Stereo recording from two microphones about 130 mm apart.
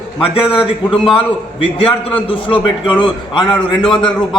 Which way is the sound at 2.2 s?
40° left (ahead or behind).